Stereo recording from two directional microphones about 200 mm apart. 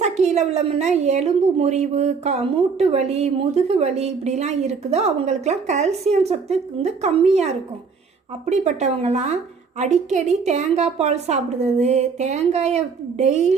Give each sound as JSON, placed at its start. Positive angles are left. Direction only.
{"t": 0.0, "sound": "a woman's voice", "side_deg": -35}